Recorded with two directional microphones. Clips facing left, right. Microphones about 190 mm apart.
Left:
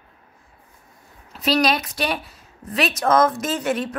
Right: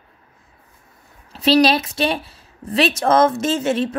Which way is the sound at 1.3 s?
30° right (ahead or behind).